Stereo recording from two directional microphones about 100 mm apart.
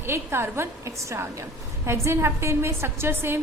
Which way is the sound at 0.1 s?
25° right (ahead or behind).